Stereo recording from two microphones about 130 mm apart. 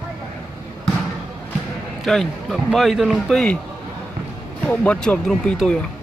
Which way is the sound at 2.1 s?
Centre (ahead or behind).